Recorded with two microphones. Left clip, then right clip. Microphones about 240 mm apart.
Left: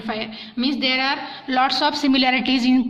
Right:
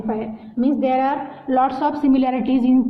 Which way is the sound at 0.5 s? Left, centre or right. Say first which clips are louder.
Right 2 dB; left.